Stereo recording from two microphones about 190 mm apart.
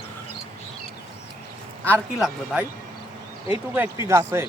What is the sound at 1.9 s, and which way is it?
Speech, centre (ahead or behind).